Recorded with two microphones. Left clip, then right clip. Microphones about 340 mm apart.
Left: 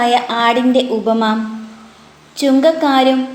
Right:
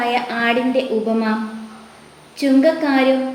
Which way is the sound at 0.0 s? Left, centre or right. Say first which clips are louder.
Left 6 dB; left.